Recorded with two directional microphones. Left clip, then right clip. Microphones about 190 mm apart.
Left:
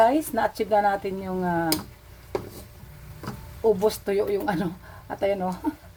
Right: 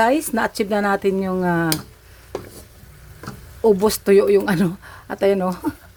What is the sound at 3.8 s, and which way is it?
A woman's voice, 45° right (ahead or behind).